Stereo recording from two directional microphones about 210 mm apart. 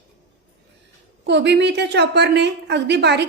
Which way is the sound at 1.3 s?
55° right (ahead or behind).